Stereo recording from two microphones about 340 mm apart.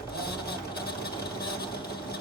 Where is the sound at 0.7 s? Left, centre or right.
Left.